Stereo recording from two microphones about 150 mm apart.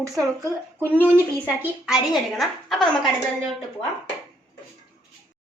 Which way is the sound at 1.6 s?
5° right (ahead or behind).